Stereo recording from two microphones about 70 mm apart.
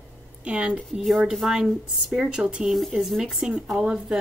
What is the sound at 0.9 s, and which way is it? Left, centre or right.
A woman's voice, centre.